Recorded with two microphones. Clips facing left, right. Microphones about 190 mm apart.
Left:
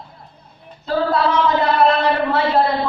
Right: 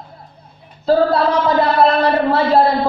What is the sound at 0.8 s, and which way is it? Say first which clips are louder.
A man's voice: right 5 dB; 35° right (ahead or behind).